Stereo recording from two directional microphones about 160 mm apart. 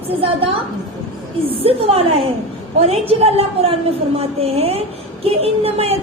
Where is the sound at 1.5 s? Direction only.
35° right (ahead or behind).